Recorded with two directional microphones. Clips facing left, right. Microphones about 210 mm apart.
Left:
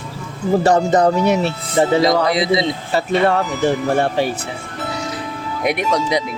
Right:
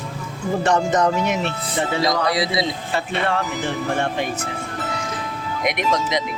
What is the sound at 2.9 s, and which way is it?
Speech, 40° left (ahead or behind).